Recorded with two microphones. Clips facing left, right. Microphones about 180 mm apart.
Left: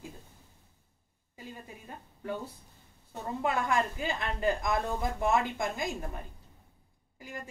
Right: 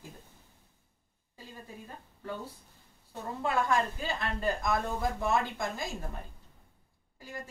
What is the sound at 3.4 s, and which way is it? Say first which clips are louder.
A woman's voice: right 1 dB; 15° left (ahead or behind).